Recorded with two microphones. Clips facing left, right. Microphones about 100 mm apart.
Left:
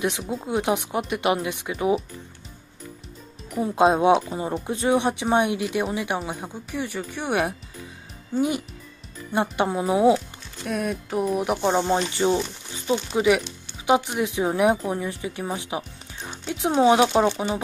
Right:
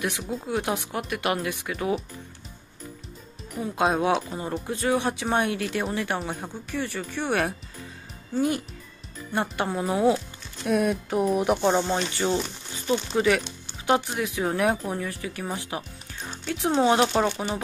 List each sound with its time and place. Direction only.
0.3 s speech: 20° left (ahead or behind)
3.6 s speech: 25° left (ahead or behind)
10.6 s speech: centre (ahead or behind)
11.9 s speech: 15° left (ahead or behind)